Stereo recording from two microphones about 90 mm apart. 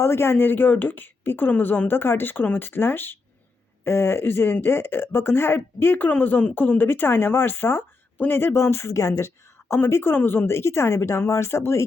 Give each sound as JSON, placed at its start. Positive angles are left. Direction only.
{"t": 0.0, "sound": "speech", "side_deg": 30}